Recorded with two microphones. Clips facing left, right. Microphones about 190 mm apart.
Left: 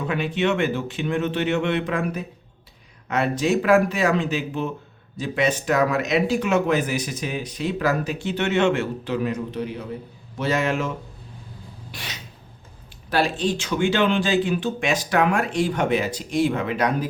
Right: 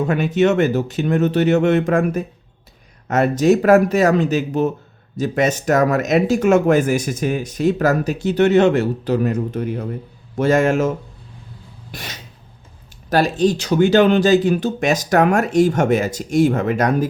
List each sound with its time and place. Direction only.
0.0 s speech: 45° right (ahead or behind)
11.9 s a sound: 45° right (ahead or behind)
13.1 s speech: 40° right (ahead or behind)